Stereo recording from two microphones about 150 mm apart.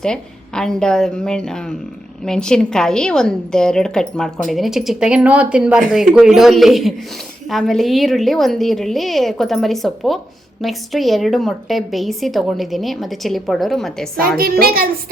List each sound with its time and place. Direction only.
0.0 s a woman's voice: 5° left (ahead or behind)
14.2 s a child's voice: 80° right